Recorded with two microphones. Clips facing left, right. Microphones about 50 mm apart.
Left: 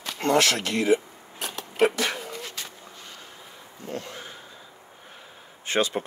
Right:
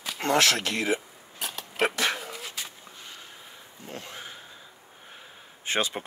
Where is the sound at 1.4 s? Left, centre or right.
Centre.